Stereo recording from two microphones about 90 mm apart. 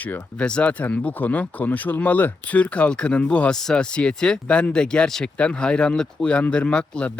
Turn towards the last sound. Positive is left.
turn(degrees=10)  # may be behind; listen again after turning